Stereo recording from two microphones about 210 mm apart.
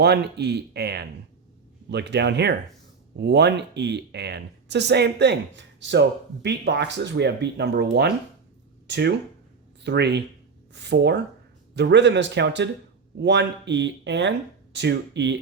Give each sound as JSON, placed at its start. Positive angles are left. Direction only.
{"t": 0.0, "sound": "speech", "side_deg": -50}